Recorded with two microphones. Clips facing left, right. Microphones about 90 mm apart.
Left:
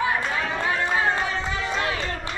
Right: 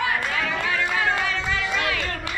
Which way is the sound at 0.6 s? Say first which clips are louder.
Left 2 dB; 90° right.